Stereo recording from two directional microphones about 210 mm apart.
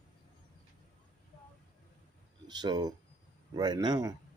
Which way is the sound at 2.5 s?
20° right (ahead or behind).